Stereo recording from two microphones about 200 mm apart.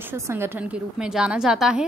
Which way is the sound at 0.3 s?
10° right (ahead or behind).